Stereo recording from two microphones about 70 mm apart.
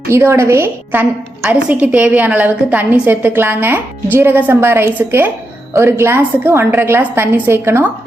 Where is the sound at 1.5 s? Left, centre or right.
Centre.